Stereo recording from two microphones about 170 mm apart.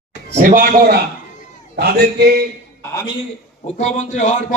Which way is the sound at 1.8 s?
70° right (ahead or behind).